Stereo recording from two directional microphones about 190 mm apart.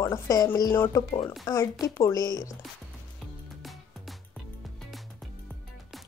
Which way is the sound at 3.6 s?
Centre (ahead or behind).